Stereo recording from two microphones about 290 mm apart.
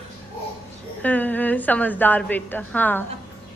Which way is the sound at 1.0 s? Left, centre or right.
Centre.